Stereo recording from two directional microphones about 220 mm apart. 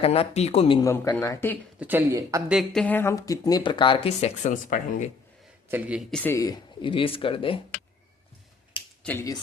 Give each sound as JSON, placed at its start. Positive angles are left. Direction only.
{"t": 0.0, "sound": "speech", "side_deg": 25}
{"t": 1.8, "sound": "speech", "side_deg": -10}
{"t": 2.5, "sound": "speech", "side_deg": 0}
{"t": 5.6, "sound": "speech", "side_deg": -10}
{"t": 9.0, "sound": "speech", "side_deg": 15}